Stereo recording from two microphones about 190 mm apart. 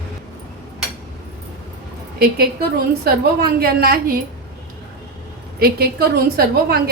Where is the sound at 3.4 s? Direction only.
55° right (ahead or behind).